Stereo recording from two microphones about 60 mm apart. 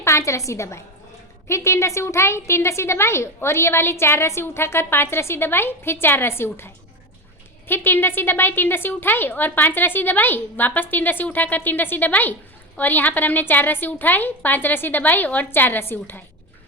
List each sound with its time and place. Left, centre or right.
0.0 s a woman's voice: left
7.7 s a woman's voice: left